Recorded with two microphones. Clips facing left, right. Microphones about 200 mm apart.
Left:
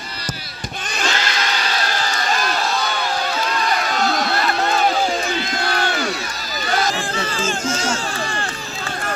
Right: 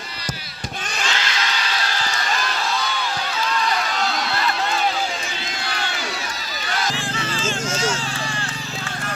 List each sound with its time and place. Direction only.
1.0 s a sound: 45° left (ahead or behind)
1.7 s run: 45° left (ahead or behind)
5.5 s crowd: 50° left (ahead or behind)